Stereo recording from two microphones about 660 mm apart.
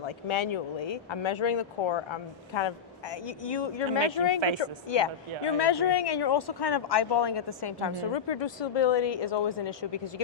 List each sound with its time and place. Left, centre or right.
0.0 s speech: left